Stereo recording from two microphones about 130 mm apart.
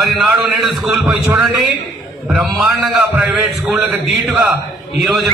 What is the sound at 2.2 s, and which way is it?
A man's voice, 5° right (ahead or behind).